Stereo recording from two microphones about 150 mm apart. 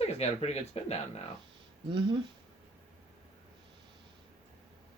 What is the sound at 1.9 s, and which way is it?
Speech, 35° right (ahead or behind).